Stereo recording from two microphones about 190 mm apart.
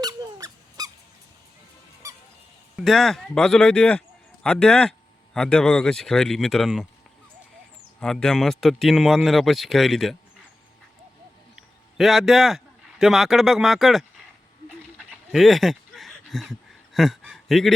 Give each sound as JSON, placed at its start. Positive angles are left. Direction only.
{"t": 0.0, "sound": "squeak", "side_deg": -20}
{"t": 2.0, "sound": "squeak", "side_deg": -15}
{"t": 2.7, "sound": "speech", "side_deg": 0}
{"t": 8.0, "sound": "speech", "side_deg": 5}
{"t": 11.5, "sound": "a man's voice", "side_deg": 0}
{"t": 15.1, "sound": "a sound", "side_deg": 0}